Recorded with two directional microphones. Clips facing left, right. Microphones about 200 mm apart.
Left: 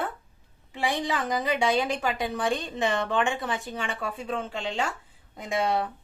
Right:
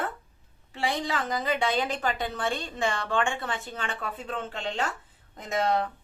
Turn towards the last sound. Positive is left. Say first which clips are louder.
# even
turn(degrees=10)  # may be behind; listen again after turning